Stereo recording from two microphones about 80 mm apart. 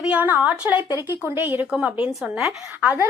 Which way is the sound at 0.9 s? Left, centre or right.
Right.